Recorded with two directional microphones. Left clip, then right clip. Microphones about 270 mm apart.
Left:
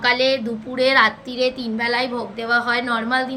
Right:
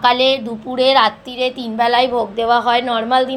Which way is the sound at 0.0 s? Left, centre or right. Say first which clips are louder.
Right 4 dB; centre.